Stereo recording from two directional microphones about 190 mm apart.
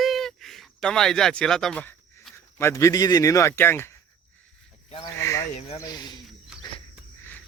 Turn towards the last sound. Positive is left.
turn(degrees=-5)  # may be behind; listen again after turning